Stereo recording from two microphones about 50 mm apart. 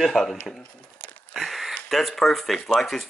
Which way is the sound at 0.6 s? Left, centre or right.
Left.